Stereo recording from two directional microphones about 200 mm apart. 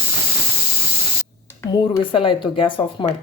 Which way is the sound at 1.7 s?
25° left (ahead or behind).